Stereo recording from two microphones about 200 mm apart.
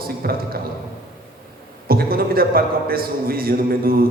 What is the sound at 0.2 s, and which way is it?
Speech, 50° right (ahead or behind).